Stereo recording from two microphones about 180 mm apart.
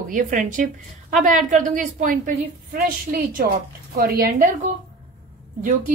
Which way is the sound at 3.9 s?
55° right (ahead or behind).